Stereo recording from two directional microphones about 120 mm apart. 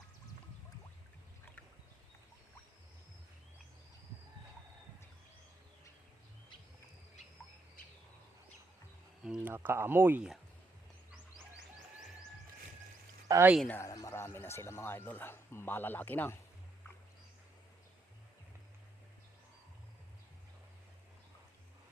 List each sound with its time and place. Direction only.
9.2 s a sound: 5° right (ahead or behind)
9.5 s speech: 20° right (ahead or behind)
13.3 s speech: 30° right (ahead or behind)
13.7 s a man's voice: 25° left (ahead or behind)